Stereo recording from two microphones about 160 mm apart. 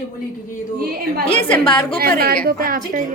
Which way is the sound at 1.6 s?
30° left (ahead or behind).